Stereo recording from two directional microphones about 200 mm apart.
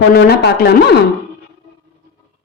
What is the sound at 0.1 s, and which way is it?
Speech, 55° left (ahead or behind).